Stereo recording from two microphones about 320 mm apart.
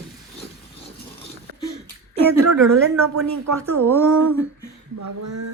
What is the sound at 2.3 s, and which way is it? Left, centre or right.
Speech, right.